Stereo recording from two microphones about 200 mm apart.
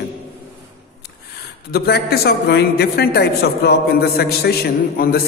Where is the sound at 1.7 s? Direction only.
55° left (ahead or behind).